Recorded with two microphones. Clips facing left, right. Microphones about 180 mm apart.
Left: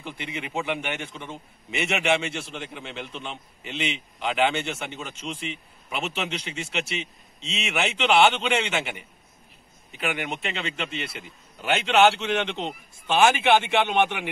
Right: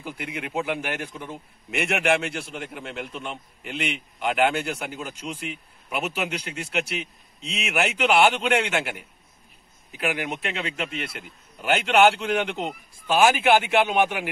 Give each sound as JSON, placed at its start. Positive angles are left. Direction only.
{"t": 0.0, "sound": "a man's voice", "side_deg": 0}